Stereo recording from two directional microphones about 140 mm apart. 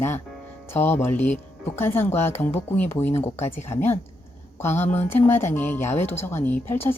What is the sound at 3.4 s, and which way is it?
Speech, 50° left (ahead or behind).